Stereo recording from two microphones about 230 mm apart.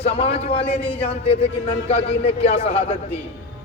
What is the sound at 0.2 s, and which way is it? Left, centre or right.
A man's voice, left.